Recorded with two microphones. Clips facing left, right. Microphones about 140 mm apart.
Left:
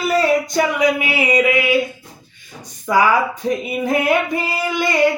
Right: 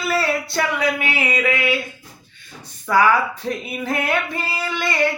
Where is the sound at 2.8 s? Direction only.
15° left (ahead or behind).